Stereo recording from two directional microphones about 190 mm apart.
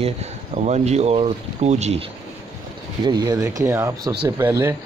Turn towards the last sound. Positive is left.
turn(degrees=-15)  # may be behind; listen again after turning